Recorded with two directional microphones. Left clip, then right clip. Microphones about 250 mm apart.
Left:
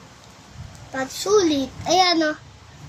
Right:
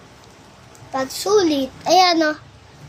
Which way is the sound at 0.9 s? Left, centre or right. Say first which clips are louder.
Right 2 dB; centre.